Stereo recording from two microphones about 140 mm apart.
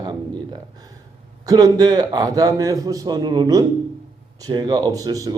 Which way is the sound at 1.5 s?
30° right (ahead or behind).